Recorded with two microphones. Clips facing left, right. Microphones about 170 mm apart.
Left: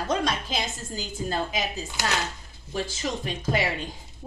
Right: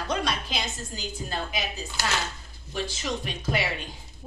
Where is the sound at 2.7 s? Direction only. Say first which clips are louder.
Left 1 dB; 45° left (ahead or behind).